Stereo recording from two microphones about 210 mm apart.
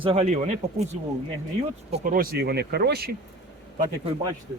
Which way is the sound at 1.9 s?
40° right (ahead or behind).